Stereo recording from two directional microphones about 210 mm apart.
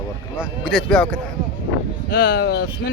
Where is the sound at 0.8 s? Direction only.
5° left (ahead or behind).